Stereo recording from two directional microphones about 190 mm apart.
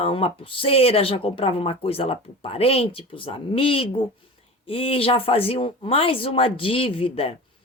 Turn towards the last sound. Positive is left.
turn(degrees=30)  # may be behind; listen again after turning